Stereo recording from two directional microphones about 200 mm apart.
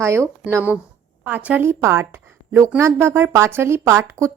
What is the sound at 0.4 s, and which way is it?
Speech, 10° right (ahead or behind).